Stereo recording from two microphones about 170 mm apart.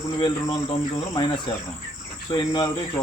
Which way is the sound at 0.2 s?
25° left (ahead or behind).